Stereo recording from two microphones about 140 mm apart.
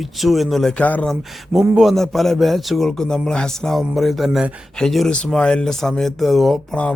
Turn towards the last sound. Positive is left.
turn(degrees=5)  # may be behind; listen again after turning